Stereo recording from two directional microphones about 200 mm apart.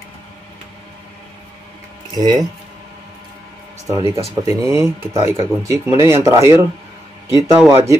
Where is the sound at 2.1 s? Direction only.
20° right (ahead or behind).